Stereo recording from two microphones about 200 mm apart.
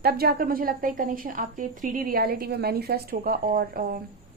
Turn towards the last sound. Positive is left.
turn(degrees=-45)  # may be behind; listen again after turning